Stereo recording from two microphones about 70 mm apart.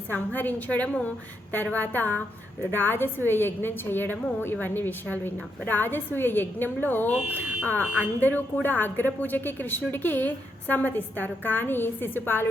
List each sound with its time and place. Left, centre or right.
0.1 s a woman's voice: left